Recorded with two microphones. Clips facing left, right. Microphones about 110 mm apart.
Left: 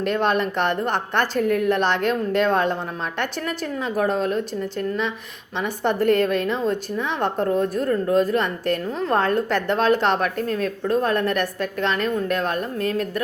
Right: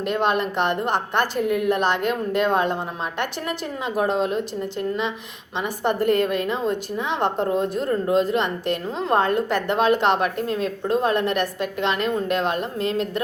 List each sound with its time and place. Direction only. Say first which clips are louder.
0.1 s a woman's voice: even; 15° right (ahead or behind)
3.8 s a woman's voice: even; 20° right (ahead or behind)